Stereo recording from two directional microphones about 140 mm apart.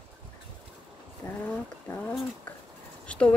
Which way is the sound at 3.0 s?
10° left (ahead or behind).